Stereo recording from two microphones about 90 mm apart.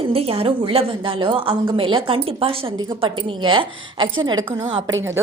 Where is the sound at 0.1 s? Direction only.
90° right.